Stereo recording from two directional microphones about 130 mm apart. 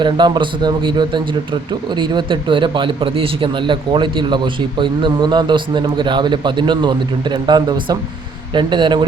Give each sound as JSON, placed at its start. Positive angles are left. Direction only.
{"t": 0.0, "sound": "a man's voice", "side_deg": -35}